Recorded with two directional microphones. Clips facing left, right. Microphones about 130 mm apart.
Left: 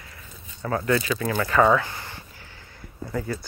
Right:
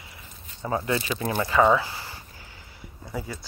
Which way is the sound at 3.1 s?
10° right (ahead or behind).